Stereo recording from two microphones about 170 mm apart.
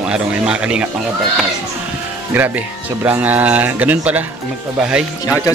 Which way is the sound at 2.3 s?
10° right (ahead or behind).